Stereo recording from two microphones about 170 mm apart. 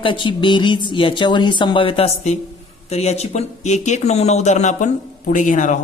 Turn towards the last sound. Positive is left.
turn(degrees=50)  # may be behind; listen again after turning